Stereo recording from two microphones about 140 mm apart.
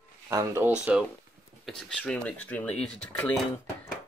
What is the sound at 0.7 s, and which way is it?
Speech, 5° right (ahead or behind).